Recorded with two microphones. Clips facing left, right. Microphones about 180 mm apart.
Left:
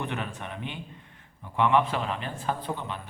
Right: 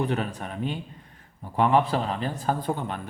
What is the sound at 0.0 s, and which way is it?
A man's voice, 35° right (ahead or behind).